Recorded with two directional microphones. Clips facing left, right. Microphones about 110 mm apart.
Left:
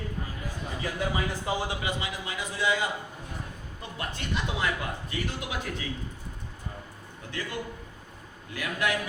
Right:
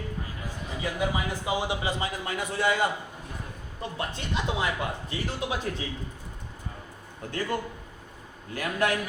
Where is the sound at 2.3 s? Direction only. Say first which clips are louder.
Right 2 dB; 55° right (ahead or behind).